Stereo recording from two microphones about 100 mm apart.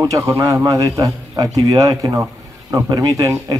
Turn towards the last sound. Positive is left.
turn(degrees=-35)  # may be behind; listen again after turning